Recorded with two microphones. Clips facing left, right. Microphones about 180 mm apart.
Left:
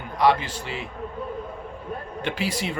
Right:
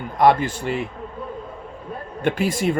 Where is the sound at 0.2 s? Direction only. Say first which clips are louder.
Right 4 dB; 50° right (ahead or behind).